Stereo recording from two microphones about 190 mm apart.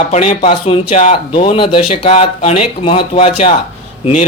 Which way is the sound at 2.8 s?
30° left (ahead or behind).